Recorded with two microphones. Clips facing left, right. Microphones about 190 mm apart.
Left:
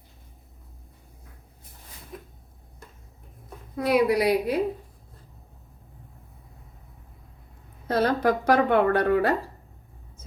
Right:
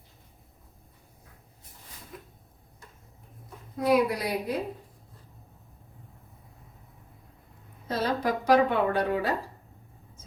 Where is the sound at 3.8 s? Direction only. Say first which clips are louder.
Left 3 dB; 70° left (ahead or behind).